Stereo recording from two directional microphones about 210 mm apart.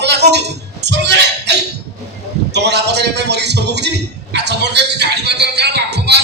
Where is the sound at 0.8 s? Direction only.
55° right (ahead or behind).